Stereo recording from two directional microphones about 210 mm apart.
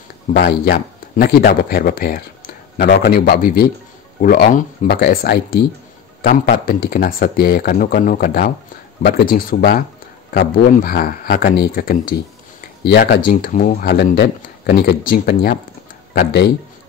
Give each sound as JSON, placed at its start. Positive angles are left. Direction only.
{"t": 0.4, "sound": "speech", "side_deg": 50}